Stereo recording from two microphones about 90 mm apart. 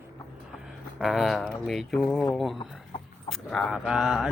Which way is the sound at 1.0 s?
Centre (ahead or behind).